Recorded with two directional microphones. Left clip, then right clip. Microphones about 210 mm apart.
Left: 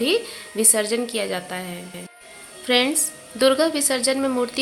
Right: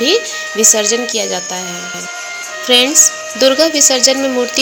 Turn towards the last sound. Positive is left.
turn(degrees=-15)  # may be behind; listen again after turning